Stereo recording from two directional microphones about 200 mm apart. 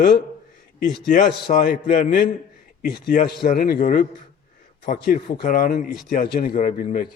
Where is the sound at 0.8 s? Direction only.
40° left (ahead or behind).